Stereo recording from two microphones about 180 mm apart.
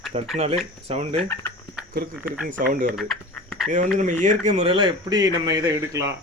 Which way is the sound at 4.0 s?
45° right (ahead or behind).